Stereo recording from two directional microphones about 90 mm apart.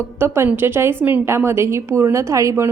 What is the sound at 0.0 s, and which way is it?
A woman's voice, 30° right (ahead or behind).